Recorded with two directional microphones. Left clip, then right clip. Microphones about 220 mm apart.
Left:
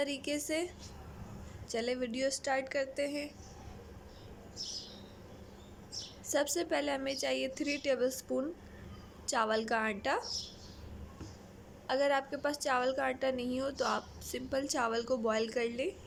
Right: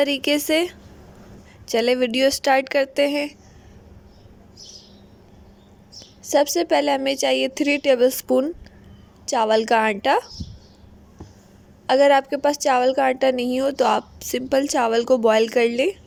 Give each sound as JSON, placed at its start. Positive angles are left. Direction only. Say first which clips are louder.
{"t": 0.0, "sound": "a woman's voice", "louder": "right 16 dB", "side_deg": -40}
{"t": 6.3, "sound": "a woman's voice", "louder": "right 15 dB", "side_deg": -25}
{"t": 11.9, "sound": "a woman's voice", "louder": "right 16 dB", "side_deg": -30}